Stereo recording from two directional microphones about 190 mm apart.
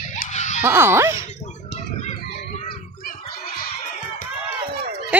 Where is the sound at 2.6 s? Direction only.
45° left (ahead or behind).